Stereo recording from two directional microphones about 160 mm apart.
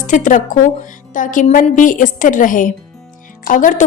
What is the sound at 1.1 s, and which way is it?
A woman's voice, 55° left (ahead or behind).